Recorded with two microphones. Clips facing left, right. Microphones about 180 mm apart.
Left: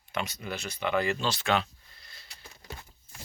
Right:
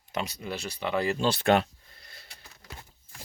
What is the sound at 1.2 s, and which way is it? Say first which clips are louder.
Speech: right 5 dB; 55° right (ahead or behind).